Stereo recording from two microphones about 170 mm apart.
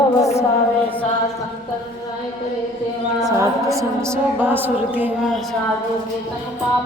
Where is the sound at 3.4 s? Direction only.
20° right (ahead or behind).